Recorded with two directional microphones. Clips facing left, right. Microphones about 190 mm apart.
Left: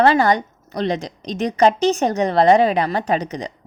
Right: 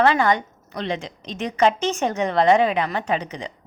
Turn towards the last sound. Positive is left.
turn(degrees=40)  # may be behind; listen again after turning